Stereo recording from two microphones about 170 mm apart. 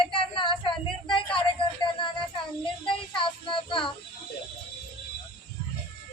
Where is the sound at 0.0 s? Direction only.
30° left (ahead or behind).